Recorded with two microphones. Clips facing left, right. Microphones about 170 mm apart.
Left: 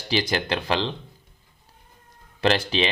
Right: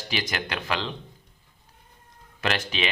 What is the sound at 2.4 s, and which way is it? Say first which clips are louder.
Speech: left 6 dB; 30° left (ahead or behind).